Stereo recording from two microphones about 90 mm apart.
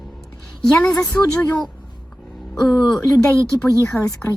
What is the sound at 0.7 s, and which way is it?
Speech, 10° left (ahead or behind).